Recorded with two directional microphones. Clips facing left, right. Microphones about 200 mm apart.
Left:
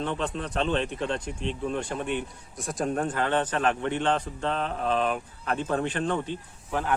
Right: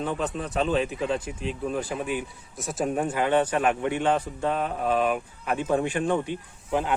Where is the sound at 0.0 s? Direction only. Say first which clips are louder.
Right 1 dB; 5° right (ahead or behind).